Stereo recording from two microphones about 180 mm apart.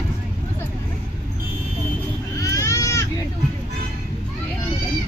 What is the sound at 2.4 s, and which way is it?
Goat, 20° left (ahead or behind).